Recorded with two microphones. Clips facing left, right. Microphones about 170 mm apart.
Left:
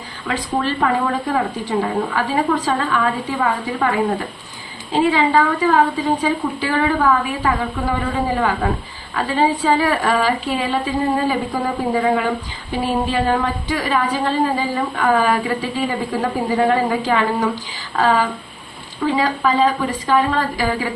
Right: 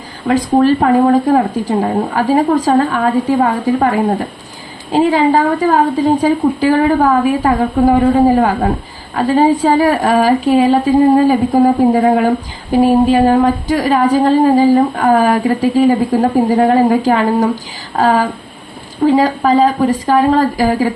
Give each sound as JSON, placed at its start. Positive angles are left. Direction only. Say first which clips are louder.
{"t": 0.3, "sound": "a woman's voice", "louder": "right 11 dB", "side_deg": -45}